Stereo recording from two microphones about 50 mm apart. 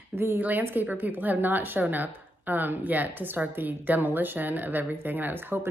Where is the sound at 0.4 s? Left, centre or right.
Right.